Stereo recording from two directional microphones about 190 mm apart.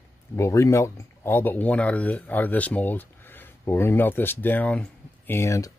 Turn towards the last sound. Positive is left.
turn(degrees=15)  # may be behind; listen again after turning